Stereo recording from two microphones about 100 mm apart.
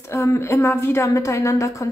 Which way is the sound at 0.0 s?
30° left (ahead or behind).